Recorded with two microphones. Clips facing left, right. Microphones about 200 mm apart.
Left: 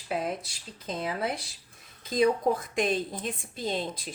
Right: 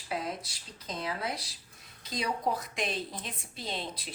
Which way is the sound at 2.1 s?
50° left (ahead or behind).